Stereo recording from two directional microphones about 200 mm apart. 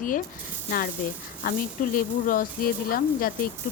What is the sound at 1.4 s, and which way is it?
Speech, 45° left (ahead or behind).